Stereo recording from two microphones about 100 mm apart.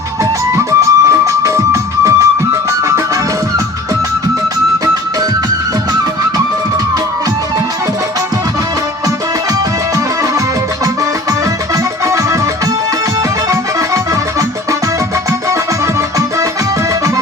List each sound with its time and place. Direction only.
0.2 s music: 30° right (ahead or behind)
12.0 s music: 35° right (ahead or behind)
13.5 s music: 30° right (ahead or behind)